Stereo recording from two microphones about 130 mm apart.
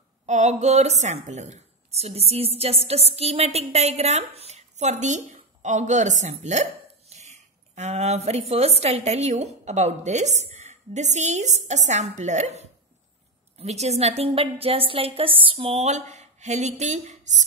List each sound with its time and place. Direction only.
0.3 s a woman's voice: 65° right (ahead or behind)